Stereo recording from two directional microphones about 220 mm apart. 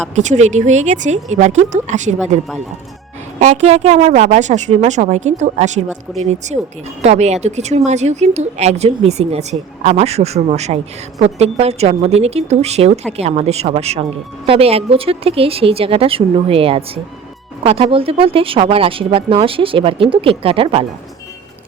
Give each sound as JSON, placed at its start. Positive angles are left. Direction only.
{"t": 0.2, "sound": "a woman's voice", "side_deg": -30}
{"t": 3.4, "sound": "a woman's voice", "side_deg": -30}